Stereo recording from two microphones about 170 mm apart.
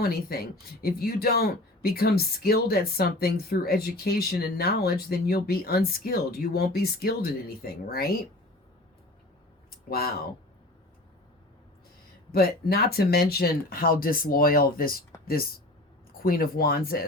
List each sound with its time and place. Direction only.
0.0 s speech: 65° left (ahead or behind)
9.6 s a sound: 65° left (ahead or behind)
12.3 s speech: 65° left (ahead or behind)